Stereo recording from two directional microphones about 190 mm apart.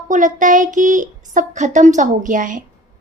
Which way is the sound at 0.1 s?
40° right (ahead or behind).